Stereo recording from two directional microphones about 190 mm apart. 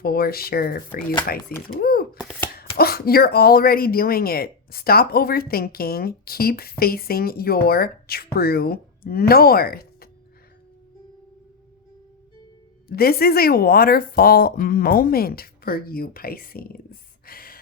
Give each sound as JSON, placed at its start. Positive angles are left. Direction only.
{"t": 0.0, "sound": "speech", "side_deg": 50}
{"t": 1.6, "sound": "typewriter", "side_deg": 50}
{"t": 2.7, "sound": "speech", "side_deg": 55}
{"t": 12.9, "sound": "speech", "side_deg": 55}